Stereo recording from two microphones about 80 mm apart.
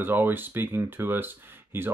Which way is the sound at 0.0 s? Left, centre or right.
Right.